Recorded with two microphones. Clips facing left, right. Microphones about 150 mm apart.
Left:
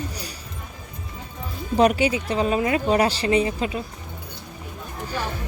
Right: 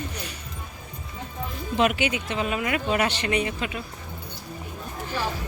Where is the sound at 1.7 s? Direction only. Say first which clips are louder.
Left 5 dB; 40° left (ahead or behind).